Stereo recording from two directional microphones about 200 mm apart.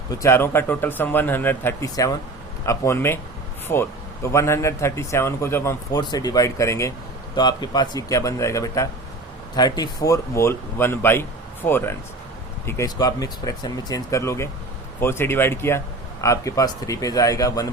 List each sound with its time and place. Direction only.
0.1 s speech: 15° left (ahead or behind)